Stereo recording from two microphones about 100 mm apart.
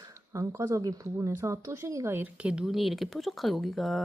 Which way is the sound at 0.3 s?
30° right (ahead or behind).